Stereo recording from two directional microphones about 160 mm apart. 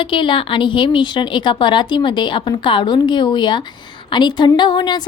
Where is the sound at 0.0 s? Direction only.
30° left (ahead or behind).